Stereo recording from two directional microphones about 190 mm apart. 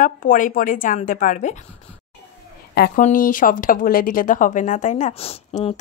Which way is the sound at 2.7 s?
55° left (ahead or behind).